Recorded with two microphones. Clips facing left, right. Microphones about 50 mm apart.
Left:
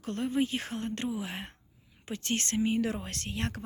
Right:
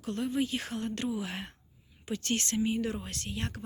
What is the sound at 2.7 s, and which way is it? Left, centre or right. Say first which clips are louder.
Speech: left 2 dB; left.